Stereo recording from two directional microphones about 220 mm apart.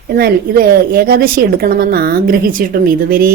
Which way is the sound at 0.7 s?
45° right (ahead or behind).